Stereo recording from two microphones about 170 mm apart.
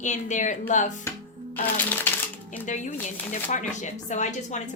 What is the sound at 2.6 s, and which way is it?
A woman's voice, 45° left (ahead or behind).